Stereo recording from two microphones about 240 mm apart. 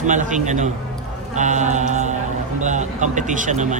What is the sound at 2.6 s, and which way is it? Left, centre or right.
Speech, right.